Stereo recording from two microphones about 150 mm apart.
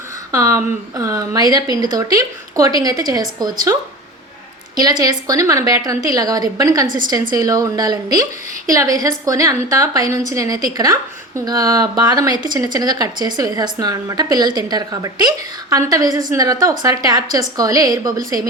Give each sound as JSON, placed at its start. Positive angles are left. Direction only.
{"t": 0.3, "sound": "a woman's voice", "side_deg": -20}
{"t": 4.8, "sound": "a woman's voice", "side_deg": -25}